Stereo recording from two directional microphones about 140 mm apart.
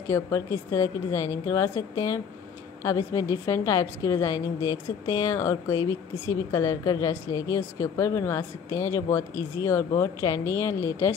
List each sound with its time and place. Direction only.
0.0 s a woman's voice: 20° left (ahead or behind)